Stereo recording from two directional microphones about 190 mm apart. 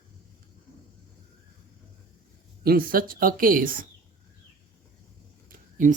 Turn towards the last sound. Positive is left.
turn(degrees=-45)  # may be behind; listen again after turning